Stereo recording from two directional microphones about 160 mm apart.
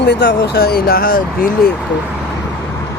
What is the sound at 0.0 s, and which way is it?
Speech, 90° left.